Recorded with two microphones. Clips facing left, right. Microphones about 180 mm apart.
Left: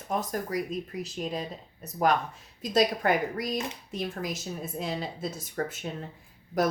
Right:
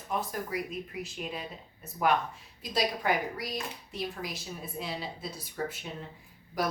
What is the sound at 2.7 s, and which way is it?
A woman's voice, 50° left (ahead or behind).